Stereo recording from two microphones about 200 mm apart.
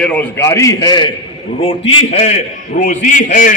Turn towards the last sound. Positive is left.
turn(degrees=40)  # may be behind; listen again after turning